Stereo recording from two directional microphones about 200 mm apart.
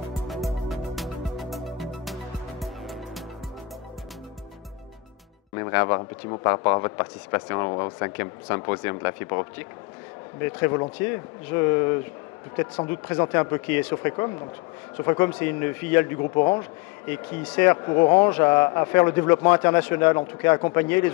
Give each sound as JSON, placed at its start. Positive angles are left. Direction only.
{"t": 0.3, "sound": "music", "side_deg": 0}
{"t": 2.6, "sound": "fowl", "side_deg": 0}
{"t": 5.6, "sound": "speech", "side_deg": 15}
{"t": 10.4, "sound": "speech", "side_deg": 10}
{"t": 13.1, "sound": "a man's voice", "side_deg": 15}
{"t": 16.2, "sound": "a man's voice", "side_deg": 20}